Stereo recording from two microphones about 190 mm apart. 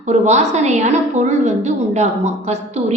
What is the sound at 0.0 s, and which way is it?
A woman's voice, 35° right (ahead or behind).